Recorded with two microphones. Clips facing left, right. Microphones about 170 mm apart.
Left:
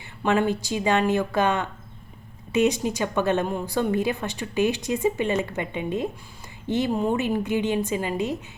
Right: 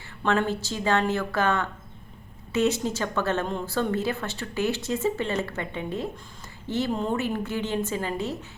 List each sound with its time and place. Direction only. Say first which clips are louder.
0.2 s a woman's voice: left 3 dB; 15° left (ahead or behind)